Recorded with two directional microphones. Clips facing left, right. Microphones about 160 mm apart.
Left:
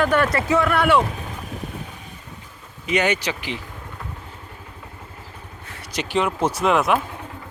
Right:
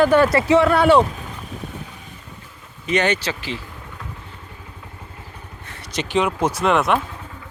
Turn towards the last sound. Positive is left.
turn(degrees=0)  # may be behind; listen again after turning